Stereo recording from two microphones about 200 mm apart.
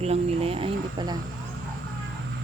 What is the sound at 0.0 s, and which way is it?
Speech, 30° right (ahead or behind).